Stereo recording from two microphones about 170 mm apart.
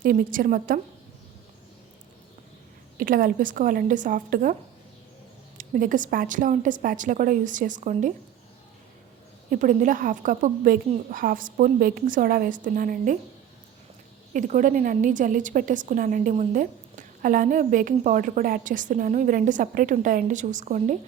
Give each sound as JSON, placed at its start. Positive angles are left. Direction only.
{"t": 0.0, "sound": "a woman's voice", "side_deg": -55}
{"t": 3.0, "sound": "a woman's voice", "side_deg": -55}
{"t": 5.5, "sound": "a woman's voice", "side_deg": -50}
{"t": 9.5, "sound": "a woman's voice", "side_deg": -50}
{"t": 14.3, "sound": "a woman's voice", "side_deg": -50}